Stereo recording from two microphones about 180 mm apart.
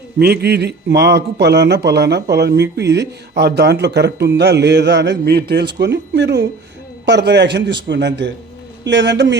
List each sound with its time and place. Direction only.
0.2 s a man's voice: 65° right (ahead or behind)